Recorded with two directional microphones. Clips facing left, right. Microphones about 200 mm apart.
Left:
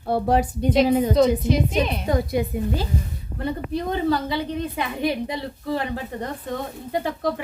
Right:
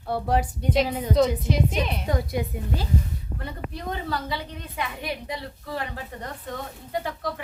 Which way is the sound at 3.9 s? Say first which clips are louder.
Left 9 dB; 25° left (ahead or behind).